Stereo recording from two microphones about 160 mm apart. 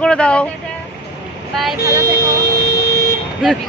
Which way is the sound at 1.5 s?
Centre (ahead or behind).